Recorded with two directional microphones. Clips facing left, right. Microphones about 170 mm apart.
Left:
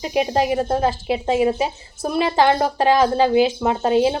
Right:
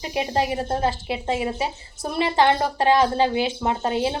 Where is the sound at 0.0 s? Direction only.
20° left (ahead or behind).